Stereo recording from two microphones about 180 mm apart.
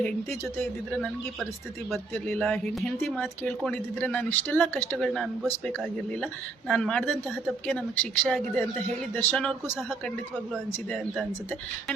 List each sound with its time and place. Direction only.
0.0 s speech: 5° left (ahead or behind)